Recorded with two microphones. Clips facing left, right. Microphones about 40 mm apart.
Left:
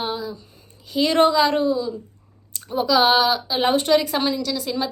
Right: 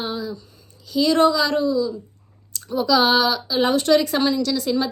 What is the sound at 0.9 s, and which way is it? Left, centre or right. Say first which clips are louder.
A woman's voice: even; left.